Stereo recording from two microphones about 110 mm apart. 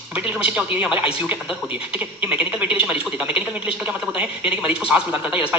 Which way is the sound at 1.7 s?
15° right (ahead or behind).